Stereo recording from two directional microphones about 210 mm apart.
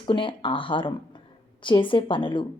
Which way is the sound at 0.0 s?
25° left (ahead or behind).